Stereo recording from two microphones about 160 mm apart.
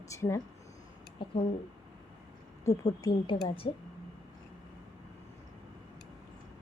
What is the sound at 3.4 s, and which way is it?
Speech, 35° left (ahead or behind).